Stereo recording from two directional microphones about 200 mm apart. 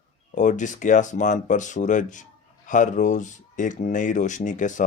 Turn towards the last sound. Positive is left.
turn(degrees=40)  # may be behind; listen again after turning